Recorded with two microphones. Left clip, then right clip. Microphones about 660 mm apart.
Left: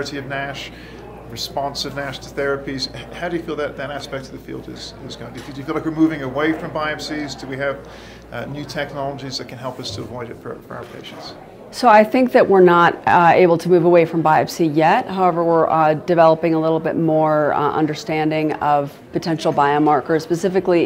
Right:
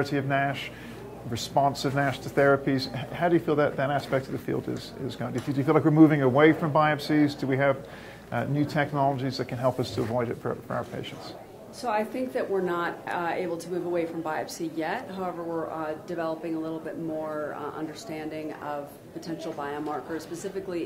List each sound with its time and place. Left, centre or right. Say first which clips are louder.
0.0 s speech: left 1 dB; right
5.7 s speech: left 1 dB; right
11.8 s a woman's voice: left 17 dB; left